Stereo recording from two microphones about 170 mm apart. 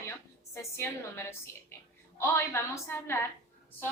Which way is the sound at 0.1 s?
15° left (ahead or behind).